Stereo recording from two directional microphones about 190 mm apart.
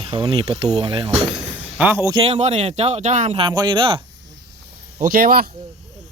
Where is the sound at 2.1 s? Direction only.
30° right (ahead or behind).